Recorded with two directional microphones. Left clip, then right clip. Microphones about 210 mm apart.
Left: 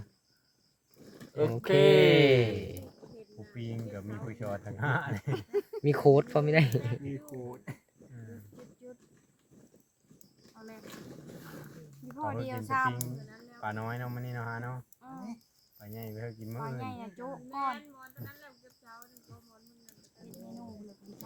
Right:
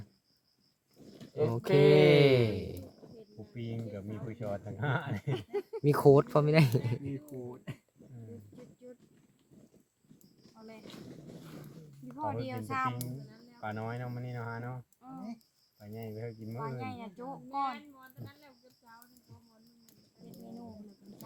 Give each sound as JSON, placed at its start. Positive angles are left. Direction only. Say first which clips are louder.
{"t": 1.2, "sound": "a sound", "louder": "left 2 dB", "side_deg": 40}
{"t": 1.9, "sound": "speech", "louder": "left 1 dB", "side_deg": -15}
{"t": 3.5, "sound": "speech", "louder": "even", "side_deg": 35}
{"t": 5.3, "sound": "speech", "louder": "left 3 dB", "side_deg": 5}
{"t": 5.8, "sound": "speech", "louder": "even", "side_deg": -15}
{"t": 7.0, "sound": "speech", "louder": "left 1 dB", "side_deg": 35}
{"t": 12.0, "sound": "speech", "louder": "left 1 dB", "side_deg": 5}
{"t": 13.3, "sound": "speech", "louder": "left 3 dB", "side_deg": 35}
{"t": 16.6, "sound": "speech", "louder": "even", "side_deg": 0}
{"t": 18.2, "sound": "a sound", "louder": "left 3 dB", "side_deg": 45}